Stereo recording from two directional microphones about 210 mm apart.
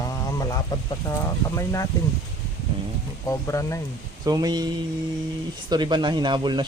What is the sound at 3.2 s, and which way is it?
Speech, 15° left (ahead or behind).